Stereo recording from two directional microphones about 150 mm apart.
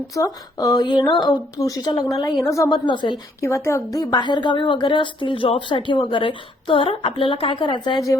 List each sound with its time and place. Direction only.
0.1 s speech: 25° left (ahead or behind)
2.8 s a woman's voice: 30° left (ahead or behind)
3.4 s a woman's voice: 20° left (ahead or behind)